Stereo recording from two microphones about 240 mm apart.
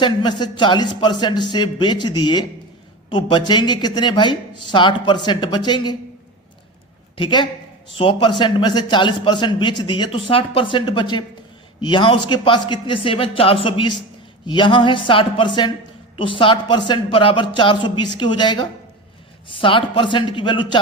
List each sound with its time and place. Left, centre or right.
0.0 s a man's voice: centre
7.2 s a man's voice: centre